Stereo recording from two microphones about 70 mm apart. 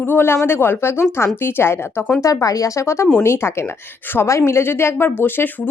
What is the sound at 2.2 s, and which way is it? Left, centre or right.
A woman's voice, left.